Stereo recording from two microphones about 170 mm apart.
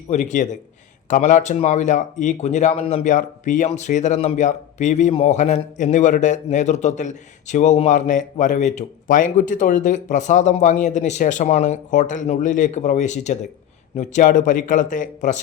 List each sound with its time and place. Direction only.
0.1 s speech: 45° left (ahead or behind)